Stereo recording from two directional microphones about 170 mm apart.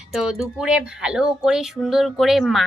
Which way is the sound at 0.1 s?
Centre (ahead or behind).